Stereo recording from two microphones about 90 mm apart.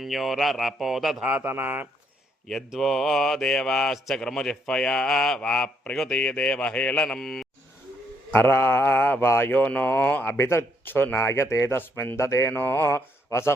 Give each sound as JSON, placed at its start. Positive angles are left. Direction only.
{"t": 0.0, "sound": "speech", "side_deg": 0}
{"t": 1.2, "sound": "speech", "side_deg": -20}
{"t": 2.6, "sound": "speech", "side_deg": 0}
{"t": 8.3, "sound": "speech", "side_deg": 25}
{"t": 10.3, "sound": "speech", "side_deg": 30}